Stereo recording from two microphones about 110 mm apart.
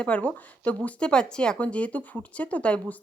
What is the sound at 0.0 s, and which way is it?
Speech, 10° left (ahead or behind).